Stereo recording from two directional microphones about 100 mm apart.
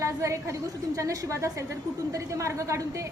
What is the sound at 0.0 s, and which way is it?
A woman's voice, 30° right (ahead or behind).